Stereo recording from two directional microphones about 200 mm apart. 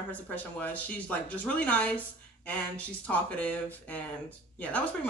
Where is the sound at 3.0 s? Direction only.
5° left (ahead or behind).